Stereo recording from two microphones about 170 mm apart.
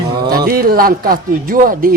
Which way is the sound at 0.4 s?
60° right (ahead or behind).